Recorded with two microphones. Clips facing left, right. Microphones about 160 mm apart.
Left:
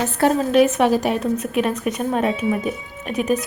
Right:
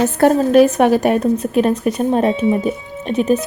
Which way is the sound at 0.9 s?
55° right (ahead or behind).